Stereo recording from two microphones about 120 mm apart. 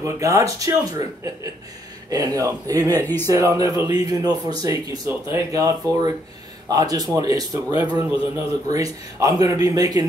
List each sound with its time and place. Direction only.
0.0 s a man's voice: 25° right (ahead or behind)
3.0 s speech: 15° left (ahead or behind)
3.3 s a man's voice: 30° right (ahead or behind)